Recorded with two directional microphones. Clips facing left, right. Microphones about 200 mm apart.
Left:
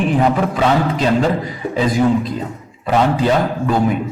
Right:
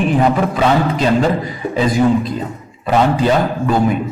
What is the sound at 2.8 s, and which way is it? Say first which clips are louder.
Speech: right 1 dB; 15° right (ahead or behind).